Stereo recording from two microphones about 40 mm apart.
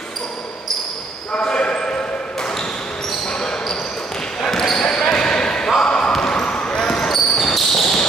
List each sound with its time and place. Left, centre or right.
1.4 s basketball bounce: left
3.3 s basketball bounce: centre
6.8 s basketball bounce: centre